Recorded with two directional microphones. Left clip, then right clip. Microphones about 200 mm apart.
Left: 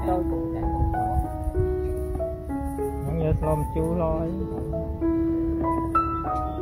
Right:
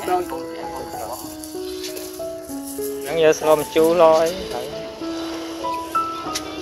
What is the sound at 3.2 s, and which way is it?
Speech, 20° right (ahead or behind).